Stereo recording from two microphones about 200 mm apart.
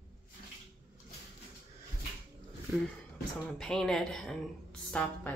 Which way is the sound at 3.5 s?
5° left (ahead or behind).